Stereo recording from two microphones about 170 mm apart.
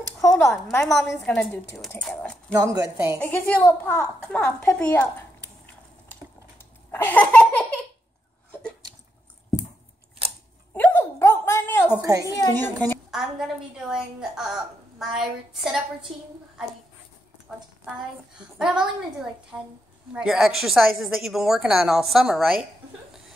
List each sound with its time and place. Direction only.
0.2 s a sound: 15° left (ahead or behind)
0.7 s a woman's voice: 15° left (ahead or behind)
2.5 s a woman's voice: 20° right (ahead or behind)
3.2 s a woman's voice: 10° left (ahead or behind)
6.9 s laughter: 10° left (ahead or behind)
10.2 s scissors: 35° right (ahead or behind)
10.7 s a sound: 10° left (ahead or behind)
12.0 s a sound: 20° right (ahead or behind)
12.4 s a woman's voice: 15° left (ahead or behind)
13.1 s a woman's voice: 5° right (ahead or behind)
17.5 s a woman's voice: centre (ahead or behind)